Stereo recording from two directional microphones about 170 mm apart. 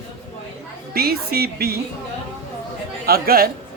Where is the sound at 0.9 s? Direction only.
60° right (ahead or behind).